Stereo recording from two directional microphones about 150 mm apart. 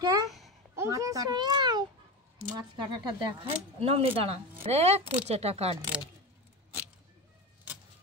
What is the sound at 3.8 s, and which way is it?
Speech, 40° right (ahead or behind).